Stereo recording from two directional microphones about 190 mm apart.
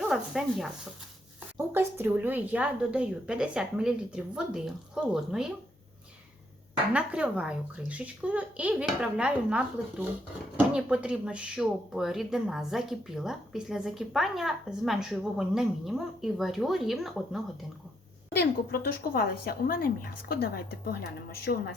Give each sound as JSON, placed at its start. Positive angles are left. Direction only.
{"t": 0.0, "sound": "speech", "side_deg": 0}
{"t": 1.5, "sound": "speech", "side_deg": -10}
{"t": 6.9, "sound": "a child's voice", "side_deg": -5}
{"t": 18.3, "sound": "speech", "side_deg": 50}